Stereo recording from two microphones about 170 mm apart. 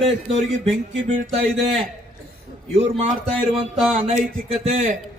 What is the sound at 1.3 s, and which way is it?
Speech, centre (ahead or behind).